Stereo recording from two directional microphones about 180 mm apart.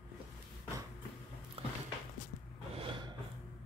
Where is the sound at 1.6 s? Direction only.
30° right (ahead or behind).